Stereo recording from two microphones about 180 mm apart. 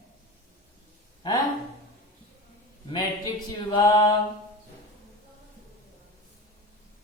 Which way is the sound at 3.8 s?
20° left (ahead or behind).